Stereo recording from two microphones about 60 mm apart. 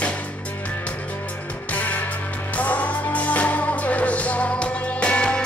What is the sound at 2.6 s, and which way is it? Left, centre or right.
Music, left.